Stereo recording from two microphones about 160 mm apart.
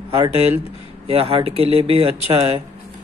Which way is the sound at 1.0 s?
40° right (ahead or behind).